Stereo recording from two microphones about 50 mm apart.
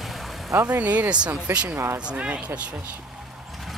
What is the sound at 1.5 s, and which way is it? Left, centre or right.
Speech, right.